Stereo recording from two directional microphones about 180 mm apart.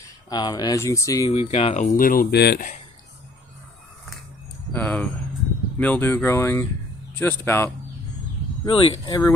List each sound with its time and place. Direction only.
0.3 s speech: 25° left (ahead or behind)
1.3 s speech: 35° left (ahead or behind); by 2.6 s 65° left (ahead or behind)
4.7 s speech: 10° left (ahead or behind)
8.6 s speech: 30° left (ahead or behind)